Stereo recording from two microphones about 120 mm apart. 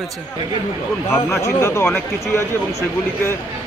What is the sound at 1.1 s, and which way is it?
Speech, 25° left (ahead or behind).